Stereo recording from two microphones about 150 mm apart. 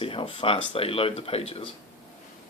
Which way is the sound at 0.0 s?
35° left (ahead or behind).